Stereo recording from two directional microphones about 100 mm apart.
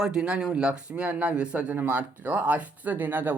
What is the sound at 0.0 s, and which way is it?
Speech, 5° right (ahead or behind).